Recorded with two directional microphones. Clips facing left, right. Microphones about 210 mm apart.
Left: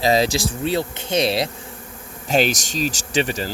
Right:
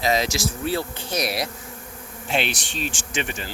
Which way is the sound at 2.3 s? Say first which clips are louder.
Left 6 dB; 40° left (ahead or behind).